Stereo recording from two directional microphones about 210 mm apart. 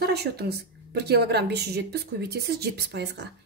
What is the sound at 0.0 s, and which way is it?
A woman's voice, 50° right (ahead or behind).